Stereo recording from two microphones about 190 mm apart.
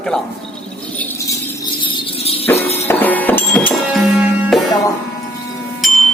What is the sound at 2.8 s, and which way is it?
Music, 10° left (ahead or behind).